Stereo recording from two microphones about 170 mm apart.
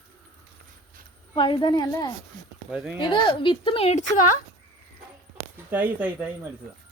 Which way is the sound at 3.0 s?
30° left (ahead or behind).